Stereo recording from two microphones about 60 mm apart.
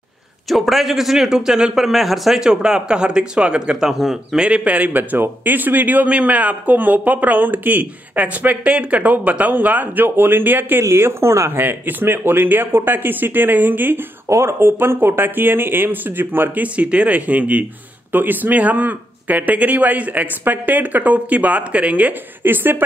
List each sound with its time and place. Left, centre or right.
0.5 s a man's voice: centre
3.9 s speech: centre
4.4 s speech: right
10.8 s speech: right
14.3 s speech: right
16.6 s speech: right